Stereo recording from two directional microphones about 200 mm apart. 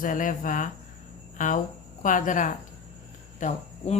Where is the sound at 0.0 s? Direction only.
40° left (ahead or behind).